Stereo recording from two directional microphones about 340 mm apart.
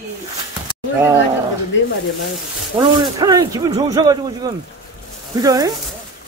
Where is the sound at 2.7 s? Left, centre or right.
Centre.